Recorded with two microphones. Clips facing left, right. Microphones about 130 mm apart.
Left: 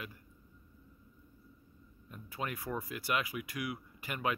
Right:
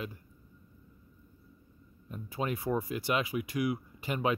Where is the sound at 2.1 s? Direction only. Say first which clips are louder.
Right 6 dB; 25° right (ahead or behind).